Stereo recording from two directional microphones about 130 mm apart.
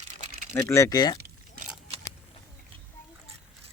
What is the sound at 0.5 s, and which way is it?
Speech, 20° left (ahead or behind).